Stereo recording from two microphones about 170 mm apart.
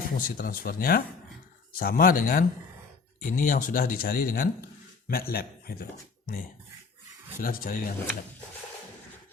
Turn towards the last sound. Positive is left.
turn(degrees=60)  # may be behind; listen again after turning